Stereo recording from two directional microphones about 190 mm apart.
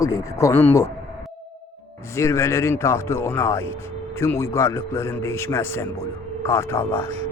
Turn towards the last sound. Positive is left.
turn(degrees=10)  # may be behind; listen again after turning